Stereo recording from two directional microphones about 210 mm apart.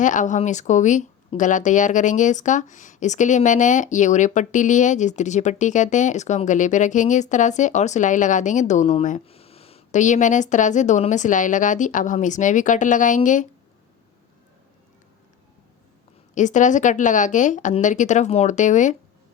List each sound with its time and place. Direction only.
0.0 s speech: 35° left (ahead or behind)
16.3 s speech: 35° left (ahead or behind)